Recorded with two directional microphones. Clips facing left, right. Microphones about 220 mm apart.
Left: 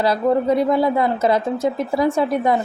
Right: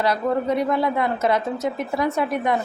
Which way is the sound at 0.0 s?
30° left (ahead or behind).